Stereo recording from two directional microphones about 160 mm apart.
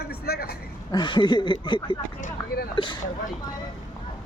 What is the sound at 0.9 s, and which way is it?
Speech, 30° left (ahead or behind).